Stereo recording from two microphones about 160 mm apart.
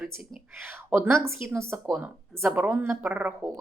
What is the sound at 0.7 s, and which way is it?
A woman's voice, 15° right (ahead or behind).